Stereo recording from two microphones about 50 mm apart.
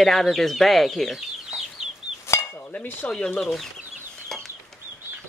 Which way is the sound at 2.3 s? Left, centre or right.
Left.